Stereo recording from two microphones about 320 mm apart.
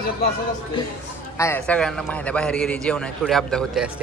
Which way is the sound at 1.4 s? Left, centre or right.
Centre.